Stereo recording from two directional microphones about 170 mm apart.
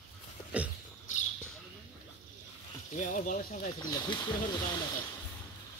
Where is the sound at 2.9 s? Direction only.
50° left (ahead or behind).